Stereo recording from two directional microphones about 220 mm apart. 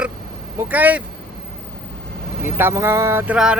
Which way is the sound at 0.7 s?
5° right (ahead or behind).